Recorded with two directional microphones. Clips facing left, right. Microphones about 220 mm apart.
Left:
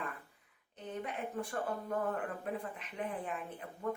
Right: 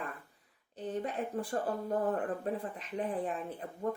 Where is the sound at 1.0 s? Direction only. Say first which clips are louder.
Right 4 dB; 35° right (ahead or behind).